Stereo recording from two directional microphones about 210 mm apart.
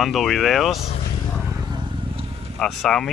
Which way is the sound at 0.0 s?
Centre (ahead or behind).